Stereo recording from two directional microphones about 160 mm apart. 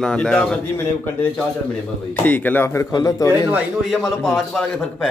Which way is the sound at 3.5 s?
Centre (ahead or behind).